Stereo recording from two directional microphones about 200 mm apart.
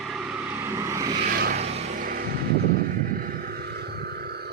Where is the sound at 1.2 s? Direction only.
45° right (ahead or behind).